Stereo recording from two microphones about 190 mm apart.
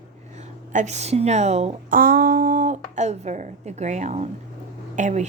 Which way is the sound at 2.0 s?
50° right (ahead or behind).